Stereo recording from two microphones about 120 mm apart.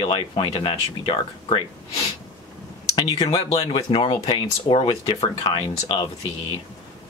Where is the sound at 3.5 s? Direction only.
50° left (ahead or behind).